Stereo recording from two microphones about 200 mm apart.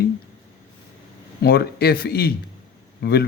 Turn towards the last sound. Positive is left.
turn(degrees=55)  # may be behind; listen again after turning